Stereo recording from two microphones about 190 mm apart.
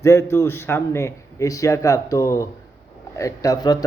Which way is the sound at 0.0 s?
15° left (ahead or behind).